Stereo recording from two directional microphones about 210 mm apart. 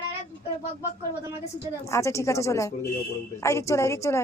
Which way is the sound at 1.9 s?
15° left (ahead or behind).